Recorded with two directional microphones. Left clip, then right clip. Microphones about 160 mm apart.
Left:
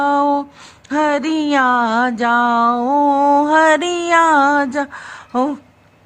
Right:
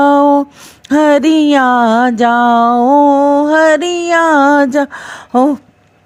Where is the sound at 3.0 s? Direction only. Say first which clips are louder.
Right 4 dB; 25° right (ahead or behind); by 5.5 s 45° right (ahead or behind).